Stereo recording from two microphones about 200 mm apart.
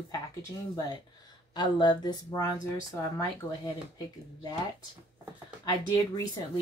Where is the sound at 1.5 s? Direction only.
20° left (ahead or behind).